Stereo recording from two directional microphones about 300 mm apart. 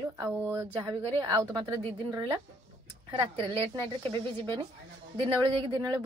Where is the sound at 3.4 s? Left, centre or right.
Centre.